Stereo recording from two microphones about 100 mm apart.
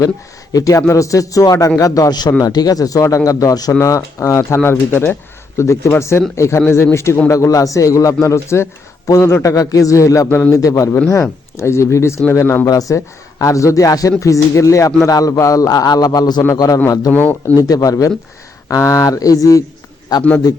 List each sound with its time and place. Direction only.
0.5 s speech: 35° left (ahead or behind)
17.1 s speech: 20° left (ahead or behind)
17.6 s a man's voice: 35° left (ahead or behind)